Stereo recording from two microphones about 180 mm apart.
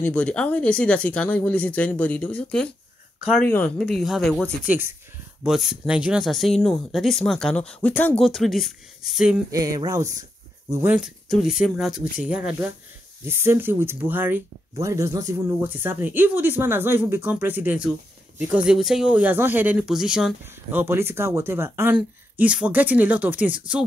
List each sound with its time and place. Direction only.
0.0 s speech: 5° left (ahead or behind)
9.5 s a sound: 20° right (ahead or behind)
10.7 s speech: 10° right (ahead or behind)